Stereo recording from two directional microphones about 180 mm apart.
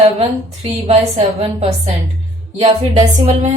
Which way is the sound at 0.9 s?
35° right (ahead or behind).